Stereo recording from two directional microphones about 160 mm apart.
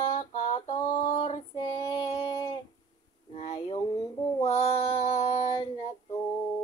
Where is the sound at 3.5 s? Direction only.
35° left (ahead or behind).